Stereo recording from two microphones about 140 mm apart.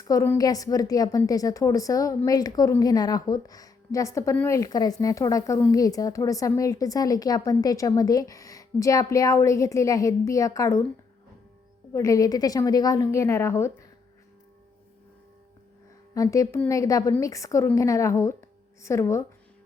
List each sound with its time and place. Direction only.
0.0 s speech: 20° left (ahead or behind)
11.9 s speech: 25° left (ahead or behind)
16.1 s speech: 25° left (ahead or behind)